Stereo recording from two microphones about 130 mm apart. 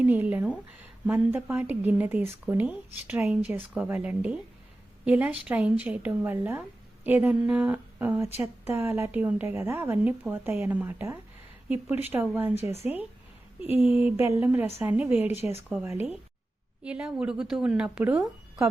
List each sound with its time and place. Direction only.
0.0 s speech: 10° right (ahead or behind)
13.8 s speech: 10° right (ahead or behind)